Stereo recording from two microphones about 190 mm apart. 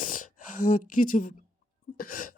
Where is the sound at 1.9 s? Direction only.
45° left (ahead or behind).